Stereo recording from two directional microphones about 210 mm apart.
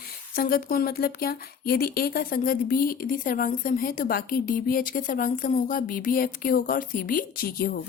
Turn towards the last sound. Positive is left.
turn(degrees=45)  # may be behind; listen again after turning